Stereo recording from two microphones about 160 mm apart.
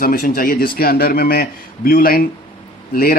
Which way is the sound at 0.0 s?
65° left (ahead or behind).